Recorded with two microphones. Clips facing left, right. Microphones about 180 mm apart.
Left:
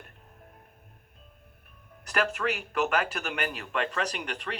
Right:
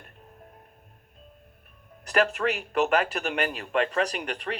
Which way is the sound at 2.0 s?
30° right (ahead or behind).